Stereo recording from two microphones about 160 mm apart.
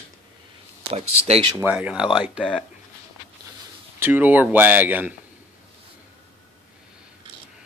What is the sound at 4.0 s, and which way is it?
Speech, 10° right (ahead or behind).